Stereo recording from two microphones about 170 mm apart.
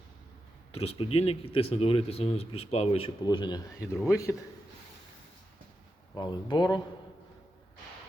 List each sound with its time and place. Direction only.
0.7 s speech: 35° left (ahead or behind)
3.2 s a man's voice: 25° left (ahead or behind)
6.1 s speech: 25° left (ahead or behind)